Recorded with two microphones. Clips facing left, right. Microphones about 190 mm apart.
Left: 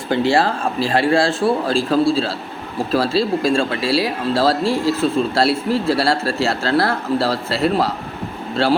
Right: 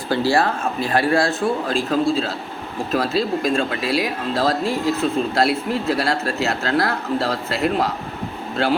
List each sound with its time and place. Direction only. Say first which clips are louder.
0.1 s speech: left 2 dB; 25° left (ahead or behind)